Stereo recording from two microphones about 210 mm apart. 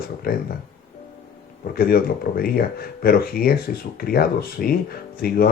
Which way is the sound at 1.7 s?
45° left (ahead or behind).